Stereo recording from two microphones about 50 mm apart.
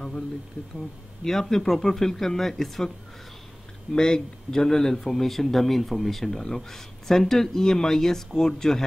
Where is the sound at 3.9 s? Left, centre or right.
Centre.